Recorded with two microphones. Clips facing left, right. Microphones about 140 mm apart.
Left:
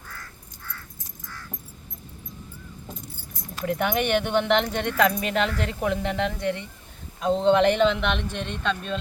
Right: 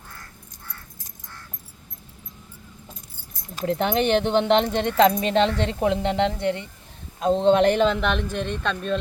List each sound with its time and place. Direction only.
3.6 s speech: 30° right (ahead or behind)